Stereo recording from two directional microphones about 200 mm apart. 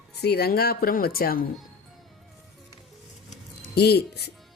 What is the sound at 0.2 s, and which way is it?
Speech, 55° left (ahead or behind).